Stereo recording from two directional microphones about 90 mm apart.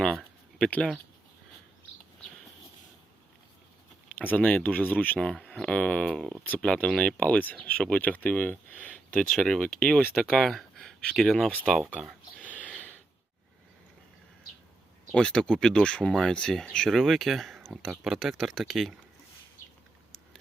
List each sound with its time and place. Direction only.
0.0 s a sound: 5° left (ahead or behind)
4.2 s speech: 20° left (ahead or behind)
9.3 s speech: 5° left (ahead or behind)
11.9 s speech: 5° right (ahead or behind)
12.4 s a sound: 15° left (ahead or behind)
15.1 s speech: 10° left (ahead or behind)